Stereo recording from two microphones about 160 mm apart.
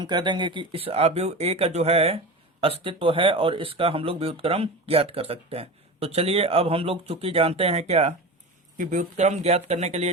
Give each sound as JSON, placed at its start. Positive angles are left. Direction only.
{"t": 0.0, "sound": "speech", "side_deg": -25}